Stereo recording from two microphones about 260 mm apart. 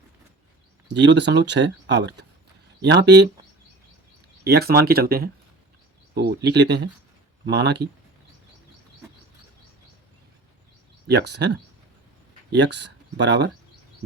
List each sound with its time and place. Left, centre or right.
0.9 s speech: right
4.4 s speech: right
11.1 s speech: right